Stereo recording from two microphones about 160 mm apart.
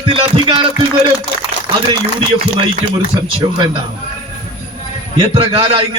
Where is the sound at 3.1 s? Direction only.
30° right (ahead or behind).